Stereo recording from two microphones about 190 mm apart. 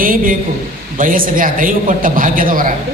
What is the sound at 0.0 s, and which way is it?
A man's voice, 45° right (ahead or behind).